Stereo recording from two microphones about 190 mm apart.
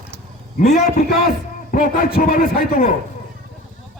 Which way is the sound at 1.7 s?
45° left (ahead or behind).